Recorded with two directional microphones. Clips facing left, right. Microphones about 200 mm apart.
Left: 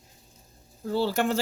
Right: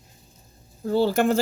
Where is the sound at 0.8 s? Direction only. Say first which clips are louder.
Right 5 dB; 50° right (ahead or behind).